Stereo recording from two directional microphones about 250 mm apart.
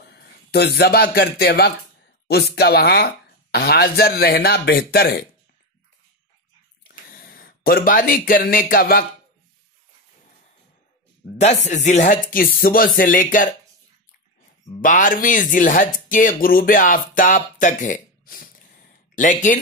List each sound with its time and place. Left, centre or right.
0.0 s a man's voice: left
6.8 s a sound: left
11.3 s speech: left
14.8 s speech: left